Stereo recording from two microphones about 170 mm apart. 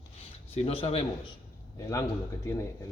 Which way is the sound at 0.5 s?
35° left (ahead or behind).